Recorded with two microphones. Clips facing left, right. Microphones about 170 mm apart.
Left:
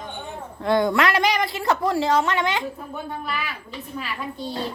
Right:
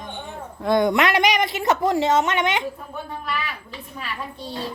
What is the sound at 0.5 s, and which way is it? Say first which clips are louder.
A woman's voice: right 1 dB; 15° right (ahead or behind).